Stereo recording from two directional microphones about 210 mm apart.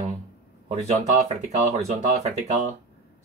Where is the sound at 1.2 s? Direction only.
30° right (ahead or behind).